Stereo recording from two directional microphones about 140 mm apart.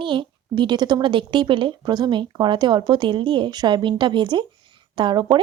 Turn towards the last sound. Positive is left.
turn(degrees=-30)  # may be behind; listen again after turning